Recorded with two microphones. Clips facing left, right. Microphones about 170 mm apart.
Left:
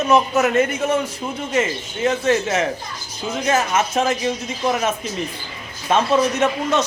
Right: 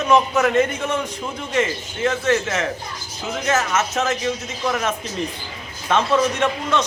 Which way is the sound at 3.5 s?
10° left (ahead or behind).